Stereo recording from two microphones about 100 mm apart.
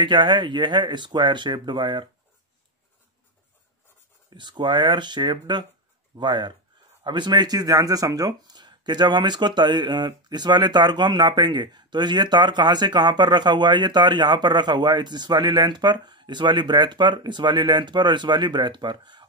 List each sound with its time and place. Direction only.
0.0 s speech: 50° right (ahead or behind)
4.3 s speech: 50° right (ahead or behind)